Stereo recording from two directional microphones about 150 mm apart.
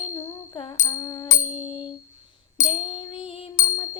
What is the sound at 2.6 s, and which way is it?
Female singing, 40° left (ahead or behind).